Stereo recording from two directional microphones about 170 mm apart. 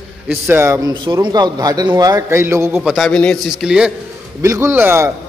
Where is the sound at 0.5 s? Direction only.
15° right (ahead or behind).